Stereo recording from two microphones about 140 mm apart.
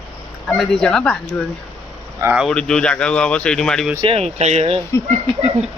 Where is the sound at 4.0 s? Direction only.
45° right (ahead or behind).